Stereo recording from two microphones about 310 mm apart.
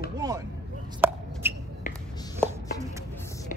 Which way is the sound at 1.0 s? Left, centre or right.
Centre.